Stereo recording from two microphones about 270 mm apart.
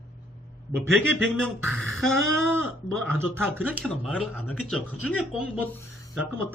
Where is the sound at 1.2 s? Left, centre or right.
Centre.